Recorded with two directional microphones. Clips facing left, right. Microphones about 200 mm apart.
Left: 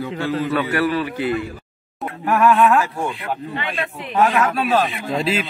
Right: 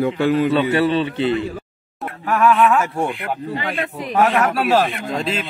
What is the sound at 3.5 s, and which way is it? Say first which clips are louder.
Speech: right 2 dB; 40° right (ahead or behind).